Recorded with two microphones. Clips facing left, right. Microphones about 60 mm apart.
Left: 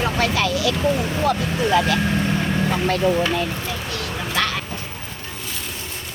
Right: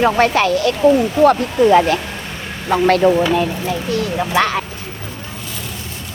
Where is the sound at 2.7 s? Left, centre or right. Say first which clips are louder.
Right 13 dB; right.